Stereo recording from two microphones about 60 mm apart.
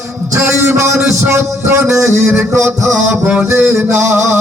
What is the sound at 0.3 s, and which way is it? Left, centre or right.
A man's voice, right.